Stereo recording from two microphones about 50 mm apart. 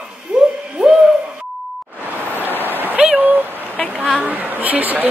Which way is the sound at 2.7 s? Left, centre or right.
Right.